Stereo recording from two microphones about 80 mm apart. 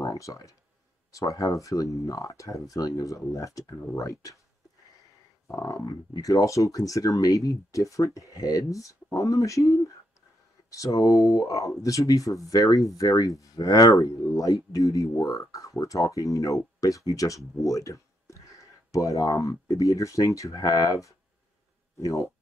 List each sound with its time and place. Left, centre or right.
0.0 s speech: left
5.7 s speech: left
22.0 s speech: left